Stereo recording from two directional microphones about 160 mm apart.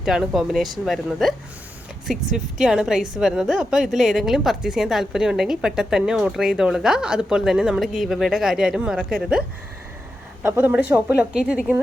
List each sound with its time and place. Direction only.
0.0 s a woman's voice: 5° right (ahead or behind)
10.4 s a woman's voice: 10° right (ahead or behind)